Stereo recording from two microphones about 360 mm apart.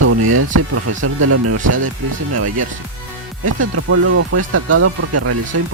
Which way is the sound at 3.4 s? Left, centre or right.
Right.